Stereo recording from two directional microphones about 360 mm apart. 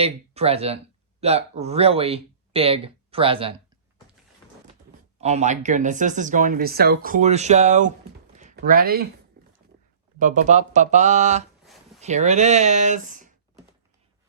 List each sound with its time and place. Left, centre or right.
0.0 s speech: centre
5.1 s speech: centre
9.4 s a sound: right
10.2 s speech: right